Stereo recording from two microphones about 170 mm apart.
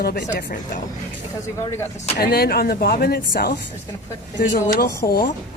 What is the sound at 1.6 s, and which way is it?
Speech, 15° left (ahead or behind).